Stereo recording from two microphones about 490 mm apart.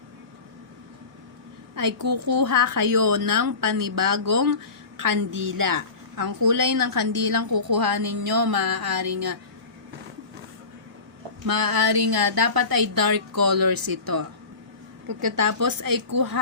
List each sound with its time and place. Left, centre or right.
1.7 s a woman's voice: right
11.4 s a woman's voice: right